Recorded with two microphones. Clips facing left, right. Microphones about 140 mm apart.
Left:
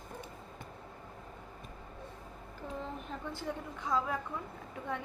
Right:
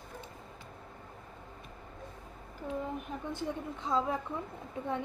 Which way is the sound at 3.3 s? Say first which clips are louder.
Right 5 dB; 20° right (ahead or behind).